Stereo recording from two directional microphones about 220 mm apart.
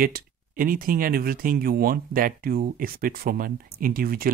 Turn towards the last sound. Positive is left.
turn(degrees=-40)  # may be behind; listen again after turning